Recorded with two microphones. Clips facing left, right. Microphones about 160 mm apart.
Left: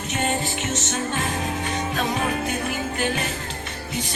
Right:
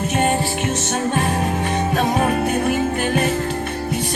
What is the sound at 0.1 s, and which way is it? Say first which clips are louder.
Music: right 4 dB; 55° right (ahead or behind).